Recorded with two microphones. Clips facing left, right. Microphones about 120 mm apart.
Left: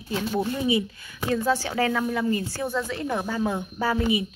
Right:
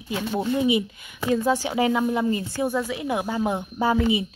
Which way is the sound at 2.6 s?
10° right (ahead or behind).